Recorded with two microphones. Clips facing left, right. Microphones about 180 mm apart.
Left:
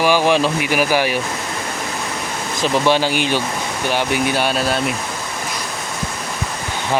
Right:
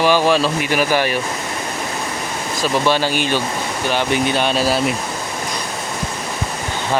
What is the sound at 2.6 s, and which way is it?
Speech, 15° left (ahead or behind).